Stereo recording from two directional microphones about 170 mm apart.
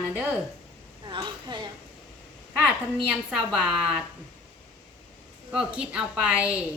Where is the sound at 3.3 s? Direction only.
5° right (ahead or behind).